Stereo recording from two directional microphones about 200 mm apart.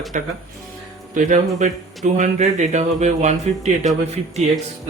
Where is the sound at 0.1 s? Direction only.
40° right (ahead or behind).